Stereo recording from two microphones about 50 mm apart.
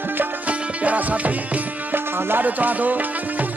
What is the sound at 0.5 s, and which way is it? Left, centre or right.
Music, right.